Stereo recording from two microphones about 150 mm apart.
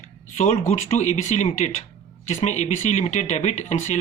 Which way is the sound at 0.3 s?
50° left (ahead or behind).